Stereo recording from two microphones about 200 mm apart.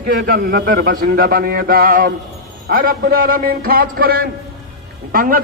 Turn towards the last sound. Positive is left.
turn(degrees=-45)  # may be behind; listen again after turning